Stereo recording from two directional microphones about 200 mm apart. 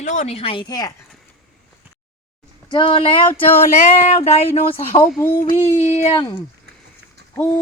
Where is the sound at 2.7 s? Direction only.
25° left (ahead or behind).